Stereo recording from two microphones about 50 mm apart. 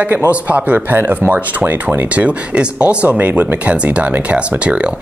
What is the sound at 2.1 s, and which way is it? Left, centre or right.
Speech, right.